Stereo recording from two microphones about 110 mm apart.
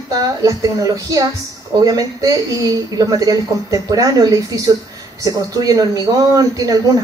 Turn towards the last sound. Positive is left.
turn(degrees=-30)  # may be behind; listen again after turning